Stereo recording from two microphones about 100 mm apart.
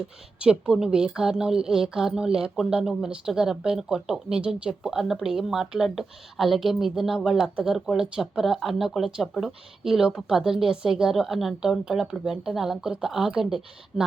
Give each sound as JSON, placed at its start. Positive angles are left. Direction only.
{"t": 0.3, "sound": "a woman's voice", "side_deg": -10}